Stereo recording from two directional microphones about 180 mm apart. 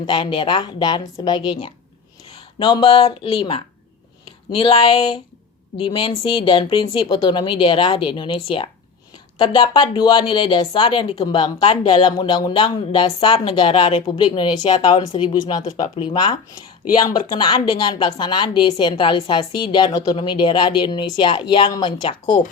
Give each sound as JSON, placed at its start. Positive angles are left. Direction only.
{"t": 0.0, "sound": "speech", "side_deg": 25}